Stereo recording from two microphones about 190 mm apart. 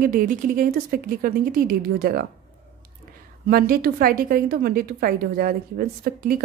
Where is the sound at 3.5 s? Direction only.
50° right (ahead or behind).